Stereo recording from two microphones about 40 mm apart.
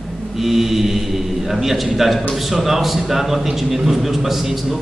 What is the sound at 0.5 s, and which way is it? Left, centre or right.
Mantra, centre.